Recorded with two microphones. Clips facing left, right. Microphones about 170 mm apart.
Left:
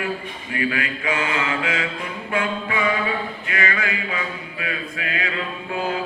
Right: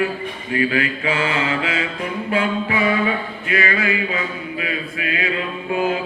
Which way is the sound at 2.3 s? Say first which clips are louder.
Right 3 dB; 30° right (ahead or behind).